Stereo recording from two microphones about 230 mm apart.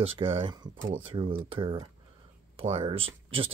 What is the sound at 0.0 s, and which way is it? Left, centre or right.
Speech, right.